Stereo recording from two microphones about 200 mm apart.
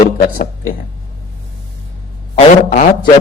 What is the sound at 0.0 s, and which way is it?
Speech, 45° left (ahead or behind).